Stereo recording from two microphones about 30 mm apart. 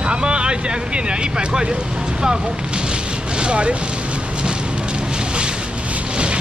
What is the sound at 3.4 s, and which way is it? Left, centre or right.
Speech, right.